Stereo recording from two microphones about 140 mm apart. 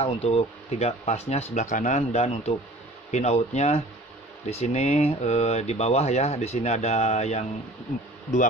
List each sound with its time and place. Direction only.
0.0 s speech: 45° left (ahead or behind)